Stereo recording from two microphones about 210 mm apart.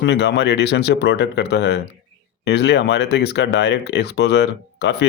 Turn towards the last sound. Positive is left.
turn(degrees=55)  # may be behind; listen again after turning